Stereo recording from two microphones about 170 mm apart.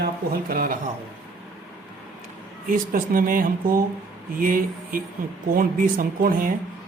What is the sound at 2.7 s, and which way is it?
Speech, 55° right (ahead or behind).